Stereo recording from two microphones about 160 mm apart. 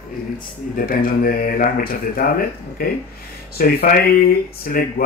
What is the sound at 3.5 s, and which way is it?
Speech, 65° left (ahead or behind).